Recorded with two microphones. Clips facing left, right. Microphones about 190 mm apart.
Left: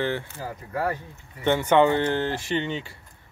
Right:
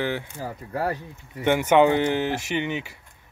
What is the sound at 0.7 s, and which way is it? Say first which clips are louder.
Speech: even; 30° right (ahead or behind).